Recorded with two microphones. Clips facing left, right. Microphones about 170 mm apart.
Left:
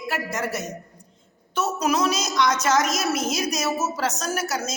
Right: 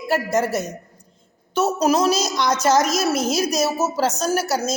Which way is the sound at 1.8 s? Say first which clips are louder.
Right 4 dB; 35° right (ahead or behind).